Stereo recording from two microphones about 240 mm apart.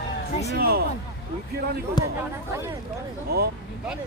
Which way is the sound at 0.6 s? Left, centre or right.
Right.